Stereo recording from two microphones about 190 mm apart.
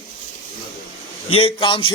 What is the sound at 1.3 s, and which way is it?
Speech, 25° left (ahead or behind).